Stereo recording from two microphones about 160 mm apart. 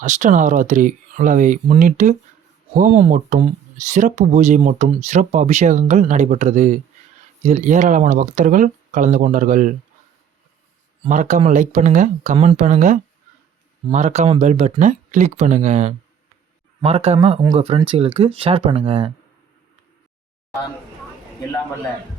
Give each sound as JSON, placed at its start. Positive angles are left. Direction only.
{"t": 0.0, "sound": "speech", "side_deg": -50}
{"t": 11.1, "sound": "speech", "side_deg": -50}
{"t": 17.4, "sound": "speech", "side_deg": -25}
{"t": 17.8, "sound": "speech", "side_deg": -35}